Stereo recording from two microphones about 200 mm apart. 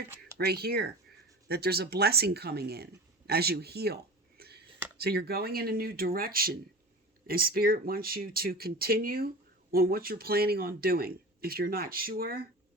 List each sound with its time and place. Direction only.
0.3 s speech: 50° right (ahead or behind)